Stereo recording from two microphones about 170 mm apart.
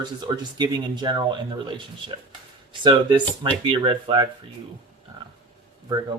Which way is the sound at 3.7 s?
30° right (ahead or behind).